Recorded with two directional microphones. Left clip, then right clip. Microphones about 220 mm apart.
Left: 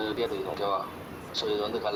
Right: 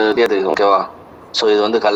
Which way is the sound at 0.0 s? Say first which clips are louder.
Right 16 dB; 45° right (ahead or behind).